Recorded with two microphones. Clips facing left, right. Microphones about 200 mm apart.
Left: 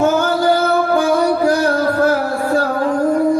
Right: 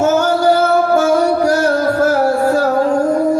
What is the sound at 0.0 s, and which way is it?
Music, 45° right (ahead or behind).